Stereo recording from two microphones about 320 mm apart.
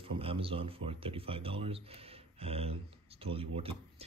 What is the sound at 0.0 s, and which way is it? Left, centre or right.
Speech, centre.